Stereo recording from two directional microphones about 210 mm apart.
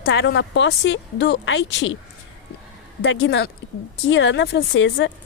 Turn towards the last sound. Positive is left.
turn(degrees=60)  # may be behind; listen again after turning